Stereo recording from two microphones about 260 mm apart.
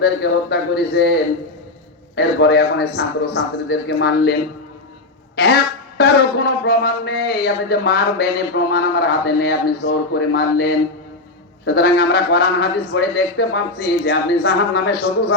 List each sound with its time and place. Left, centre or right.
0.0 s speech: left
6.0 s speech: left